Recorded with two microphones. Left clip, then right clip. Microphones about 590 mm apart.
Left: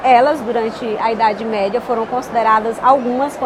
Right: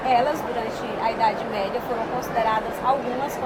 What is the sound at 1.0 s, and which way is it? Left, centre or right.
A woman's voice, left.